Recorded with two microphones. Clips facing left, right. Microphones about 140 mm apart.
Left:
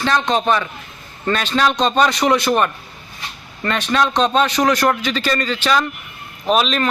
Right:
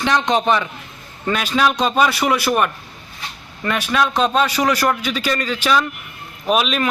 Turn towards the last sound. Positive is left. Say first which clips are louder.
# left 1 dB
turn(degrees=-5)  # may be behind; listen again after turning